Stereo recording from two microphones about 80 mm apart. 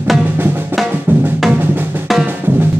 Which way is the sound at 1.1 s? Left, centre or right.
Right.